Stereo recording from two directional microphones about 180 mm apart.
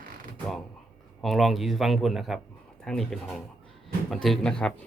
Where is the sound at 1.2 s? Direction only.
Centre (ahead or behind).